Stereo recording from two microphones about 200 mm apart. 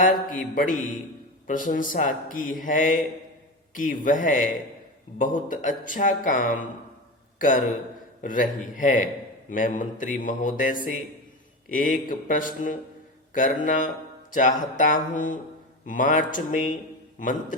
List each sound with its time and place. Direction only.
0.0 s a man's voice: 45° left (ahead or behind)
4.0 s a man's voice: 40° left (ahead or behind)
13.3 s a sound: 40° left (ahead or behind)
14.8 s a man's voice: 40° left (ahead or behind)